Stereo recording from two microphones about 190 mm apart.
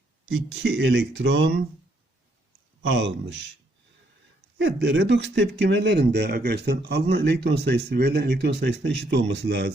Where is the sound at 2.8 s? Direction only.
70° right (ahead or behind).